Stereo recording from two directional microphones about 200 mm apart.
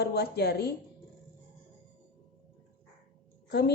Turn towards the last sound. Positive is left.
turn(degrees=55)  # may be behind; listen again after turning